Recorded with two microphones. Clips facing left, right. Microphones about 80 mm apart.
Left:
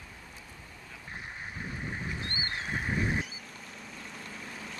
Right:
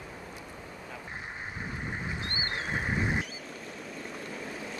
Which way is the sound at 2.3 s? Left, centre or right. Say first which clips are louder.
Right 2 dB; right.